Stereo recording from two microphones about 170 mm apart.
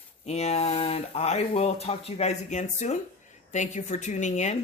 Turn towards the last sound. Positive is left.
turn(degrees=45)  # may be behind; listen again after turning